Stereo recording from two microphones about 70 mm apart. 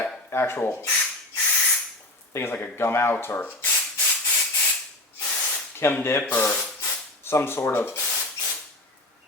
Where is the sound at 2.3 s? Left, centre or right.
Left.